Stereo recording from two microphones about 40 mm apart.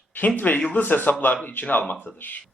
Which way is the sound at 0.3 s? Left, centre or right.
Left.